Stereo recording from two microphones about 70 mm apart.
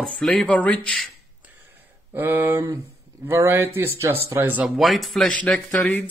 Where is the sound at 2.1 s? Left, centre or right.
Right.